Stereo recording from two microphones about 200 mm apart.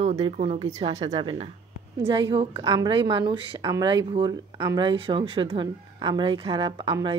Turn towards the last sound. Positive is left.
turn(degrees=-20)  # may be behind; listen again after turning